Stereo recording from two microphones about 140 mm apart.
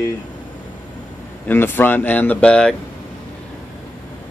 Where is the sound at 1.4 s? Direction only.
15° left (ahead or behind).